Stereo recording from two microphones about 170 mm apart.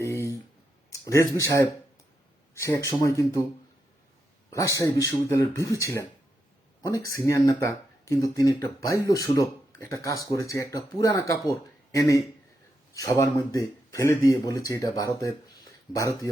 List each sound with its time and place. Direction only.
0.0 s a sound: 15° left (ahead or behind)
0.9 s speech: 15° left (ahead or behind)
4.5 s speech: 20° left (ahead or behind)